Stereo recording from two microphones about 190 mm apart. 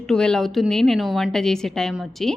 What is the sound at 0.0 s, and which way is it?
A woman's voice, 5° left (ahead or behind).